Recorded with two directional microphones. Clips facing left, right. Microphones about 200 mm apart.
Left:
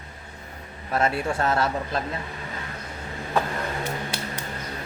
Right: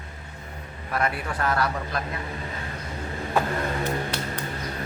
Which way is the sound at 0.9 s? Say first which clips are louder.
Left 4 dB; 25° left (ahead or behind).